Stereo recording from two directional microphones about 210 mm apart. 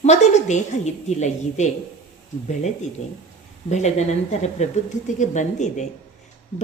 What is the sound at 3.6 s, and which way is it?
A woman's voice, 30° left (ahead or behind).